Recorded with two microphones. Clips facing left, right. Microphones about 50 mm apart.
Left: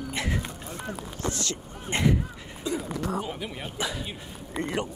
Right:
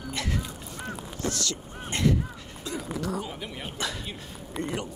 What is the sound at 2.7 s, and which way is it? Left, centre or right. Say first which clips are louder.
Dog: left 3 dB; centre.